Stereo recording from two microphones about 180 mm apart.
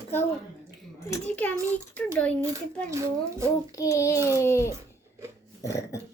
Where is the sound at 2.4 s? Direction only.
20° right (ahead or behind).